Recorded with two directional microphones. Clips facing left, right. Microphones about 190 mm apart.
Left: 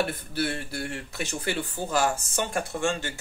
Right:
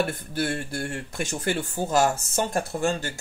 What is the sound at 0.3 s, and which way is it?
Speech, 45° right (ahead or behind).